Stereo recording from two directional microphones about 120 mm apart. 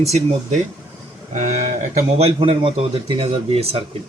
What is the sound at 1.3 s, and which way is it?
Speech, 80° right.